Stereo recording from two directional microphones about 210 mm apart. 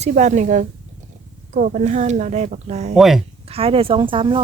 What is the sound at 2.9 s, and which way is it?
Speech, centre (ahead or behind).